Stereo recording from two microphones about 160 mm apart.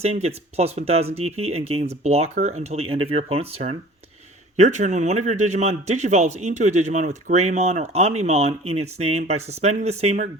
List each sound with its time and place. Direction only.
0.0 s a man's voice: 40° right (ahead or behind)